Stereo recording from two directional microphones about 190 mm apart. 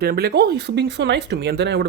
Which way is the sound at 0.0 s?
55° right (ahead or behind).